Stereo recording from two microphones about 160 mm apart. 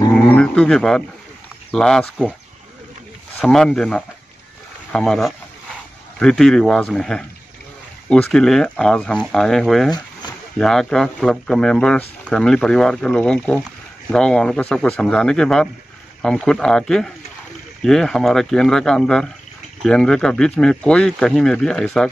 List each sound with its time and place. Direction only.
0.1 s dog: 5° left (ahead or behind)
1.7 s speech: 5° left (ahead or behind)
3.3 s speech: 5° left (ahead or behind)
9.8 s a sound: 25° left (ahead or behind)
10.6 s speech: 5° left (ahead or behind)